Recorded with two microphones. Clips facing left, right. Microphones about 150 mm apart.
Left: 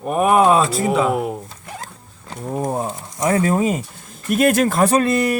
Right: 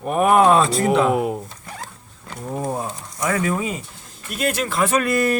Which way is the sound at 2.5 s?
20° left (ahead or behind).